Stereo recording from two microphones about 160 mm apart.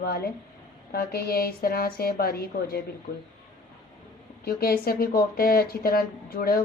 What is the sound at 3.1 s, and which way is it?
Speech, 50° left (ahead or behind).